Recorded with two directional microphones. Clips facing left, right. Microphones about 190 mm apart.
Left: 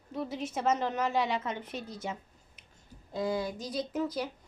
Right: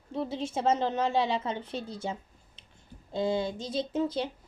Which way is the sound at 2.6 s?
30° right (ahead or behind).